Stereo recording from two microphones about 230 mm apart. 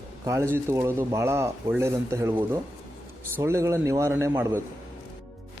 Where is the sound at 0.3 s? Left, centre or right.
Centre.